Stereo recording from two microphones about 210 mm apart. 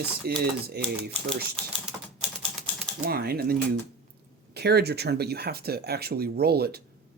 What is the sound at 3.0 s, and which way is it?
Speech, 45° right (ahead or behind).